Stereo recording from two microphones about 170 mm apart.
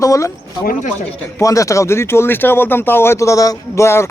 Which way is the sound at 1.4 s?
20° left (ahead or behind).